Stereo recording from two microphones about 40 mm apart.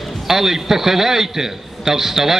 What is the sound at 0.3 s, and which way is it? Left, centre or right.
A man's voice, centre.